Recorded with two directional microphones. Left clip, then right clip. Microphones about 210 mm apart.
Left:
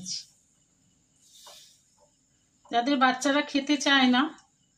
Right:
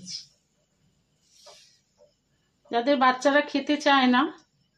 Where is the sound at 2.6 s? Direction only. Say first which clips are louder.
Right 2 dB; 40° right (ahead or behind).